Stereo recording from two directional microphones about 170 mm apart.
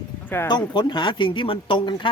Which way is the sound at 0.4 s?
25° left (ahead or behind).